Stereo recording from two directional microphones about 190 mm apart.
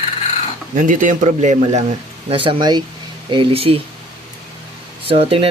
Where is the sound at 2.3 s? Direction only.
25° right (ahead or behind).